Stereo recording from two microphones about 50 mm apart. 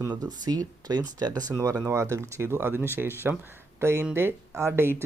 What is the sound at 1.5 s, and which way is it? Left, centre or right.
Speech, right.